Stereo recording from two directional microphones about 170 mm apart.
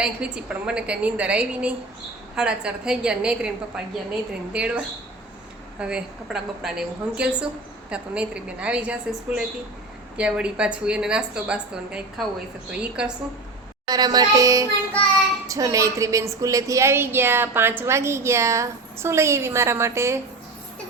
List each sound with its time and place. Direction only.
0.0 s a woman's voice: 5° right (ahead or behind)
5.8 s a woman's voice: 5° right (ahead or behind)
13.8 s music: 25° right (ahead or behind)
15.4 s a woman's voice: 20° right (ahead or behind)